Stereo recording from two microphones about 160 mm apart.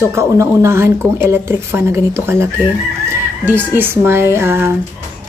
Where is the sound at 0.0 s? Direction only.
15° right (ahead or behind).